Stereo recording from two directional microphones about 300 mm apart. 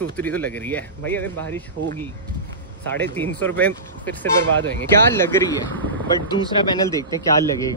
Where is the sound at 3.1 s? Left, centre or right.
Centre.